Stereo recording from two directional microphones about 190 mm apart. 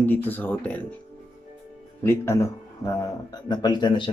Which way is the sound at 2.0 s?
15° left (ahead or behind).